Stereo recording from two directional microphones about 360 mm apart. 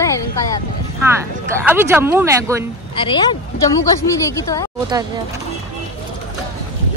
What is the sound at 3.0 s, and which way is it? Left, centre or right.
Speech, centre.